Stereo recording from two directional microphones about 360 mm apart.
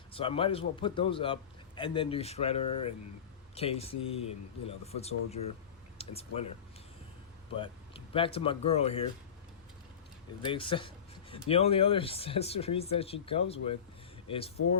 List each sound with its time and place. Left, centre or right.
0.1 s speech: centre
7.5 s speech: centre
10.4 s speech: centre